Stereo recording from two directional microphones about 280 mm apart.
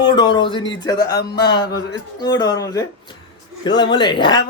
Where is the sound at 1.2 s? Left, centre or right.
Left.